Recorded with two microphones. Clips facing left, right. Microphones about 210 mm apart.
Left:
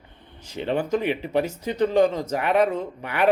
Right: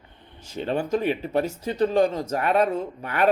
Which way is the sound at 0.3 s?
15° left (ahead or behind).